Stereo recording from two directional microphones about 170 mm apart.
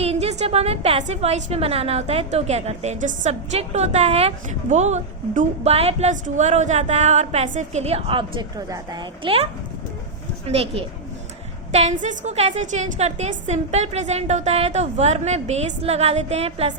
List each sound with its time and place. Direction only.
0.0 s a woman's voice: 40° right (ahead or behind)